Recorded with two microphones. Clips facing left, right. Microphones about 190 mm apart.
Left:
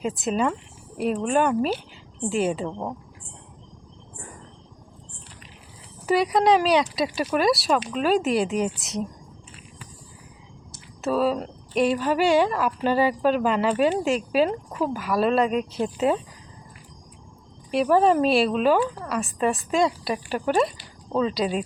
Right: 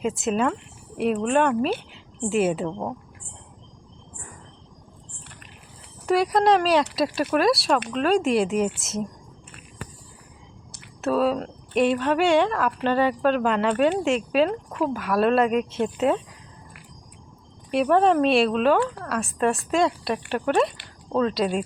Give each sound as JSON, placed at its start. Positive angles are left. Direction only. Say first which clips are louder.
{"t": 0.0, "sound": "a woman's voice", "louder": "right 1 dB", "side_deg": 0}
{"t": 6.1, "sound": "a woman's voice", "louder": "even", "side_deg": 0}
{"t": 11.0, "sound": "a woman's voice", "louder": "right 1 dB", "side_deg": 0}
{"t": 17.7, "sound": "a woman's voice", "louder": "even", "side_deg": 0}